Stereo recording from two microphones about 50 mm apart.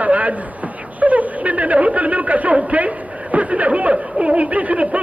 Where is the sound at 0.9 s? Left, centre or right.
Right.